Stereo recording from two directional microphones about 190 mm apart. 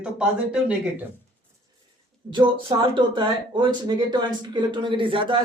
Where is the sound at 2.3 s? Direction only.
25° right (ahead or behind).